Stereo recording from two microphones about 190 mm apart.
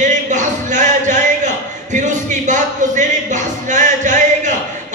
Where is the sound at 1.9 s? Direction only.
40° right (ahead or behind).